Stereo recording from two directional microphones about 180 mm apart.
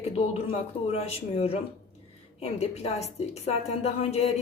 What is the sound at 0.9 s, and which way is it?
A woman's voice, 35° left (ahead or behind).